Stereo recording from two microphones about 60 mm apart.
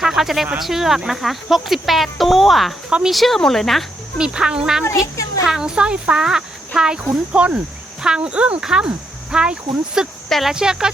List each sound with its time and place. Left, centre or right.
0.0 s speech: centre
4.2 s speech: centre
10.2 s speech: centre
10.5 s speech: centre